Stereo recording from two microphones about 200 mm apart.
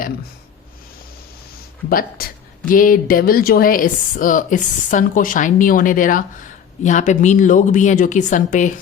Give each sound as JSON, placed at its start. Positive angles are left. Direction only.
{"t": 1.9, "sound": "a woman's voice", "side_deg": 45}